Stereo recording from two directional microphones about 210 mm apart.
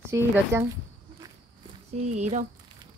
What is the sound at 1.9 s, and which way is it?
Speech, 30° right (ahead or behind).